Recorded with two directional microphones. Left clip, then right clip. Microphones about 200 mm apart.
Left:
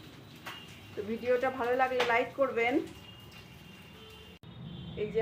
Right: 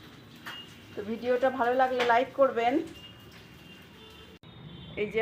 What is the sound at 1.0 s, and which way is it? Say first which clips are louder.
Music: right 1 dB; 5° right (ahead or behind).